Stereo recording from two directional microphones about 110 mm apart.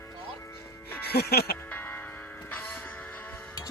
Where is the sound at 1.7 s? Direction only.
20° left (ahead or behind).